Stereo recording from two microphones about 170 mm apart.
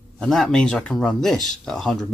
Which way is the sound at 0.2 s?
5° left (ahead or behind).